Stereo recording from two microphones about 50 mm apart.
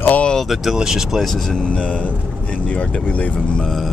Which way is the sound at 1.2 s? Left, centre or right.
Centre.